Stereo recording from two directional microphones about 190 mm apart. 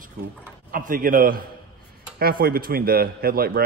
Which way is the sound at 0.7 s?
45° right (ahead or behind).